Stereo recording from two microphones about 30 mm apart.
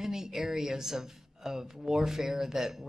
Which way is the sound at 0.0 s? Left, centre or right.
Centre.